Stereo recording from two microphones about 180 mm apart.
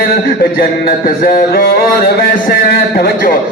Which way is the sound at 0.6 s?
55° left (ahead or behind).